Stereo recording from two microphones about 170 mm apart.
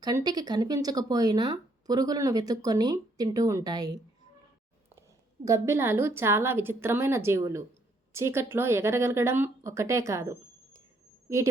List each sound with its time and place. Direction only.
0.0 s speech: 25° right (ahead or behind)
4.9 s speech: 20° right (ahead or behind)